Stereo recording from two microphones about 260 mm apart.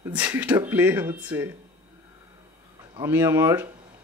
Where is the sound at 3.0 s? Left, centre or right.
Centre.